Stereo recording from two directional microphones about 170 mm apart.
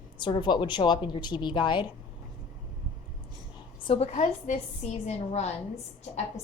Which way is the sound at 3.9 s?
35° left (ahead or behind).